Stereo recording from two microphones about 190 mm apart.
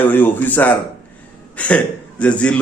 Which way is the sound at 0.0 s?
10° left (ahead or behind).